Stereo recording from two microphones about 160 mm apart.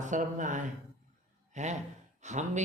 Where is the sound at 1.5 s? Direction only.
45° right (ahead or behind).